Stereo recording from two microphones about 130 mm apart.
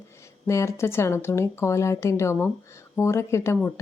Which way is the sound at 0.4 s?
25° left (ahead or behind).